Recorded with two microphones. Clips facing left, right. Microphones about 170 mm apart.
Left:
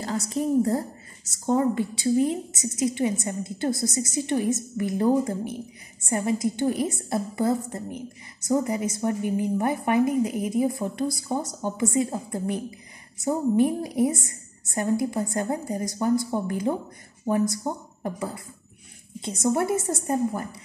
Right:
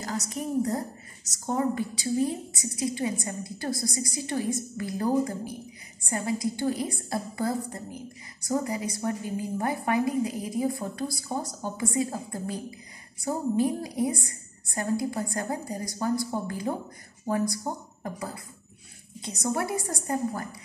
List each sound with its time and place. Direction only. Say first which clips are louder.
0.0 s a woman's voice: left 5 dB; 30° left (ahead or behind)
17.6 s a woman's voice: left 3 dB; centre (ahead or behind)
18.0 s a woman's voice: left 5 dB; 25° left (ahead or behind)